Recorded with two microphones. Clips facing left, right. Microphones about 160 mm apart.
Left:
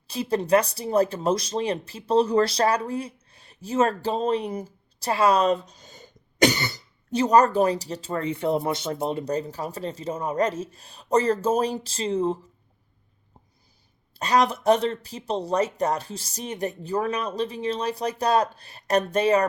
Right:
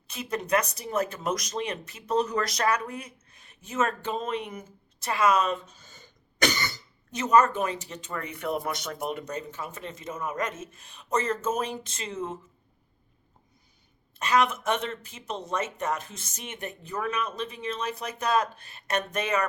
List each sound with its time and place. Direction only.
0.1 s speech: 30° left (ahead or behind)
5.9 s cough: 15° left (ahead or behind)
7.1 s speech: 35° left (ahead or behind)
14.1 s speech: 35° left (ahead or behind)